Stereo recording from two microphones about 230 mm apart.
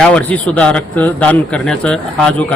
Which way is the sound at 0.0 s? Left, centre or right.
Centre.